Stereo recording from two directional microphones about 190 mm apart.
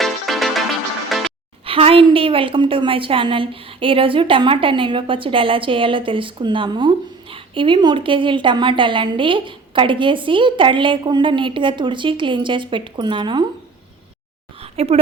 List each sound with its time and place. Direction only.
0.0 s music: centre (ahead or behind)
1.6 s a woman's voice: 30° right (ahead or behind)
14.6 s a sound: 30° right (ahead or behind)